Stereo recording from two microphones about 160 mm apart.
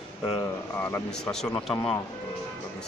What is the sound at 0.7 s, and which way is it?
Speech, 10° left (ahead or behind).